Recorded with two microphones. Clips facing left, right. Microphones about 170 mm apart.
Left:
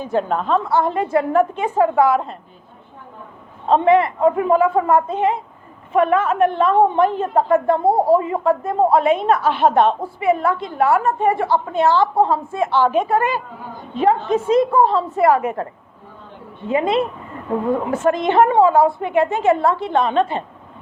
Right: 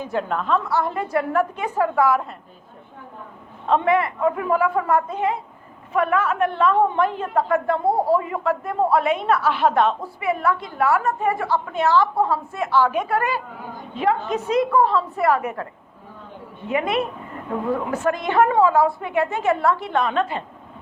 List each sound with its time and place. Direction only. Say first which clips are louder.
0.0 s a woman's voice: left 4 dB; 30° left (ahead or behind)
3.7 s a woman's voice: left 5 dB; 25° left (ahead or behind)
16.6 s a woman's voice: left 4 dB; 30° left (ahead or behind)